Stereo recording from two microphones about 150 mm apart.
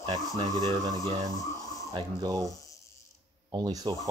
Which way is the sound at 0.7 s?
25° right (ahead or behind).